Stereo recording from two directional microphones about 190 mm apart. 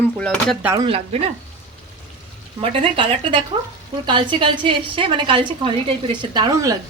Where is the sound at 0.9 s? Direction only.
30° right (ahead or behind).